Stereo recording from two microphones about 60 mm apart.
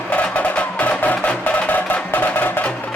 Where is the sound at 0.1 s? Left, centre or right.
Left.